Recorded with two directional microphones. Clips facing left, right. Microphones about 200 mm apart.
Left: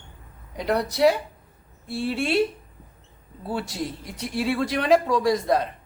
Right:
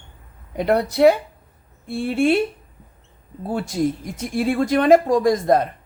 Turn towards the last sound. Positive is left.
turn(degrees=-50)  # may be behind; listen again after turning